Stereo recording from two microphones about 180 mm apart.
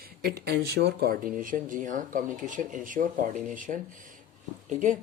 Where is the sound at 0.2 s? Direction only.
60° right (ahead or behind).